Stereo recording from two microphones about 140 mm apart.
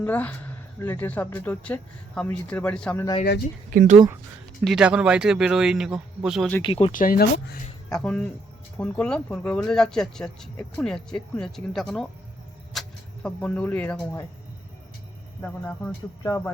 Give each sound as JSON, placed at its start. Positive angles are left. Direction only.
{"t": 0.0, "sound": "speech", "side_deg": 10}
{"t": 3.7, "sound": "speech", "side_deg": -90}
{"t": 4.6, "sound": "speech", "side_deg": -5}
{"t": 6.6, "sound": "speech", "side_deg": 40}
{"t": 6.9, "sound": "speech", "side_deg": 80}
{"t": 7.9, "sound": "speech", "side_deg": 5}
{"t": 12.7, "sound": "a sound", "side_deg": 0}
{"t": 13.2, "sound": "speech", "side_deg": 10}
{"t": 15.4, "sound": "speech", "side_deg": 15}